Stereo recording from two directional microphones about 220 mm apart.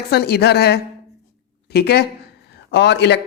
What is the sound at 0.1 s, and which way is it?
A woman's voice, 45° left (ahead or behind).